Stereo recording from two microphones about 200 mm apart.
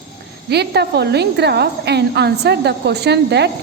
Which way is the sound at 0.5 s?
55° right (ahead or behind).